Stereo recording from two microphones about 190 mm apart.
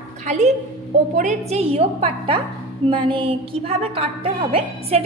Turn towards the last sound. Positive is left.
turn(degrees=-30)  # may be behind; listen again after turning